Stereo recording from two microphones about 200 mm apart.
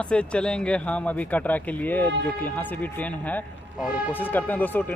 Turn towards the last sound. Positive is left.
turn(degrees=10)  # may be behind; listen again after turning